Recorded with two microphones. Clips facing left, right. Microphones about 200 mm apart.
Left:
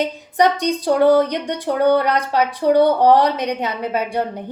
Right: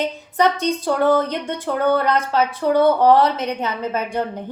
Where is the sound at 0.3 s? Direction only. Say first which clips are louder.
Left 2 dB; 15° left (ahead or behind).